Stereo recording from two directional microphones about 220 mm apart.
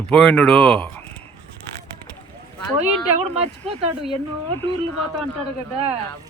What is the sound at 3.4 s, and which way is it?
Speech, 25° right (ahead or behind).